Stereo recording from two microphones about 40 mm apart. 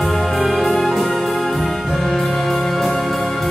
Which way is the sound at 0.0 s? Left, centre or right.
Centre.